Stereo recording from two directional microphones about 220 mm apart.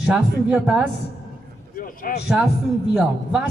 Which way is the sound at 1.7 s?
40° left (ahead or behind).